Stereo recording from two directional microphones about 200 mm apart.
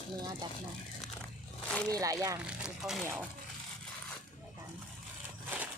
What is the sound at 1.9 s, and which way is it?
Speech, 15° right (ahead or behind).